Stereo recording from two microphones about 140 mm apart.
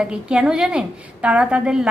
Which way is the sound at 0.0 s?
5° right (ahead or behind).